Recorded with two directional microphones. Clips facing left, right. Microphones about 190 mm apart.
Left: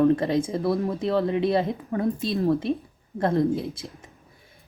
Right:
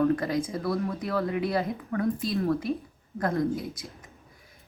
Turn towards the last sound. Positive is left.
turn(degrees=25)  # may be behind; listen again after turning